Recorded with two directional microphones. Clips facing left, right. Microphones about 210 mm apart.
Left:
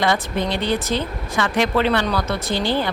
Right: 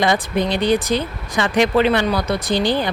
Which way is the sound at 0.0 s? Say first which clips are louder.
Right 2 dB; 15° right (ahead or behind).